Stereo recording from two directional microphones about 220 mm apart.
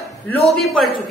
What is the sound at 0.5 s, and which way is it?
Speech, centre (ahead or behind).